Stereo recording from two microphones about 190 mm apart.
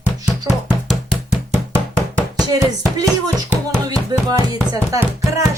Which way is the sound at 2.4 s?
20° right (ahead or behind).